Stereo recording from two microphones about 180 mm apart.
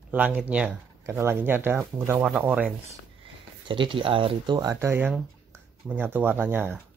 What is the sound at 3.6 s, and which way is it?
Speech, 25° right (ahead or behind).